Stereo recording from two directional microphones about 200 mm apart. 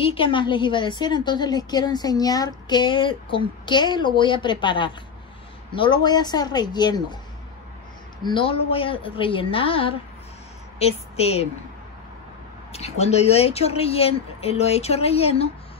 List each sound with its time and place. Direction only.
0.0 s a woman's voice: 25° left (ahead or behind)
8.2 s a woman's voice: 25° left (ahead or behind)
11.1 s speech: 30° left (ahead or behind)
12.7 s speech: 30° left (ahead or behind)